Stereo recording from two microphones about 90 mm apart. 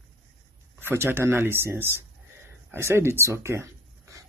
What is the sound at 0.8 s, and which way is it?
Speech, 25° right (ahead or behind).